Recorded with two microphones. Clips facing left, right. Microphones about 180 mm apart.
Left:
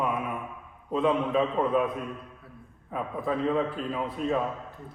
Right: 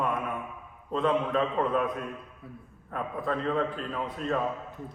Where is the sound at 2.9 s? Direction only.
5° left (ahead or behind).